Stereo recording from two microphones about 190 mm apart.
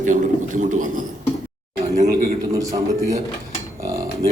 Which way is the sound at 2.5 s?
15° right (ahead or behind).